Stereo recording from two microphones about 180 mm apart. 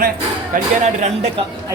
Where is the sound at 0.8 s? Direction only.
40° right (ahead or behind).